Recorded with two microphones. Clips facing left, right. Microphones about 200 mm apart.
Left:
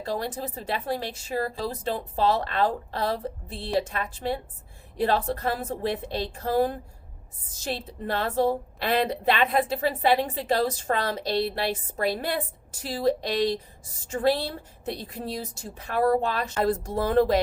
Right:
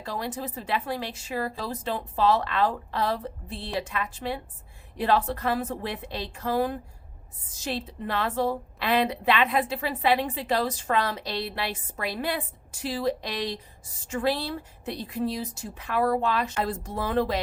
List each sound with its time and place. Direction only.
0.0 s a woman's voice: 35° left (ahead or behind)